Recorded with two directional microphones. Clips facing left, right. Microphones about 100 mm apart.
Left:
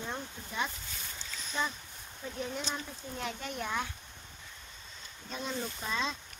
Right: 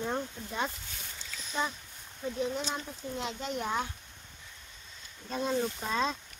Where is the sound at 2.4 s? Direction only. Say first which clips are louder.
Right 3 dB; 20° right (ahead or behind).